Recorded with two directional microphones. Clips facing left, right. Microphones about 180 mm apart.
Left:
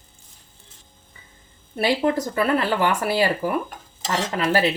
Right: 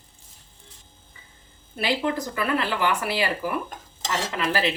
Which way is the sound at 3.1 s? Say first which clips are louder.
Left 5 dB; 45° left (ahead or behind).